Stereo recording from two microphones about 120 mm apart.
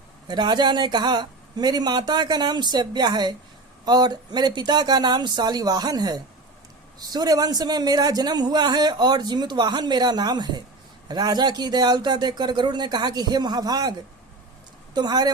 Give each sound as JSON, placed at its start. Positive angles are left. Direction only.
{"t": 0.3, "sound": "a man's voice", "side_deg": -35}
{"t": 14.9, "sound": "a man's voice", "side_deg": -35}